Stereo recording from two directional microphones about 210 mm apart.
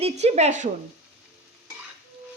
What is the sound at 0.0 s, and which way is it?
Speech, 30° right (ahead or behind).